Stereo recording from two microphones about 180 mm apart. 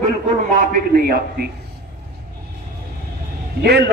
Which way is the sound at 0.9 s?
60° right (ahead or behind).